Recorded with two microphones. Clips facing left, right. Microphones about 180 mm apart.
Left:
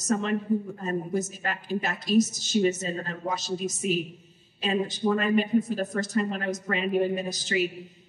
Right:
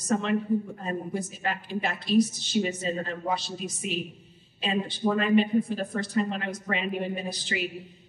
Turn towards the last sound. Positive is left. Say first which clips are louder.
# left 4 dB
turn(degrees=45)  # may be behind; listen again after turning